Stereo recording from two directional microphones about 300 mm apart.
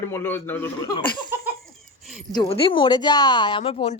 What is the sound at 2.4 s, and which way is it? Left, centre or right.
Speech, centre.